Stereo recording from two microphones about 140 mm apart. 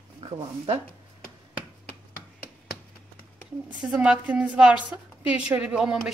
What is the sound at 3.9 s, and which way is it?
A woman's voice, 10° right (ahead or behind).